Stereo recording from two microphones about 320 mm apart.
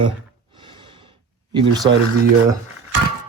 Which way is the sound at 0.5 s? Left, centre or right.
Centre.